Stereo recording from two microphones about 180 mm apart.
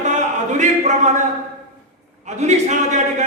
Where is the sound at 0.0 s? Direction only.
40° right (ahead or behind).